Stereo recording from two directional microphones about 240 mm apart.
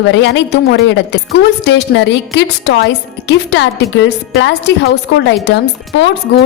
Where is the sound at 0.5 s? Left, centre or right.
Left.